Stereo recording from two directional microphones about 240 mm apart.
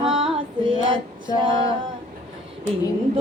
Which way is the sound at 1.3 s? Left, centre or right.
Centre.